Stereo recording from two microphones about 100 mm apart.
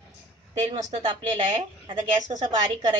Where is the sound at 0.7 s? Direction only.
45° right (ahead or behind).